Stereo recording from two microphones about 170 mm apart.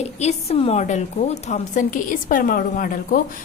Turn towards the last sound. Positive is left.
turn(degrees=55)  # may be behind; listen again after turning